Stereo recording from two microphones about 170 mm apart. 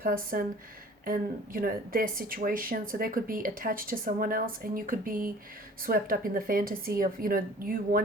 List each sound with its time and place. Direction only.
0.0 s speech: 55° right (ahead or behind)